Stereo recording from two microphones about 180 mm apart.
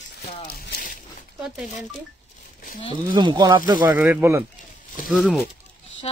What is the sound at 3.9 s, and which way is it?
Speech, 10° right (ahead or behind).